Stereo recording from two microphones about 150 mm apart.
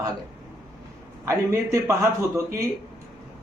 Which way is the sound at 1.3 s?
20° right (ahead or behind).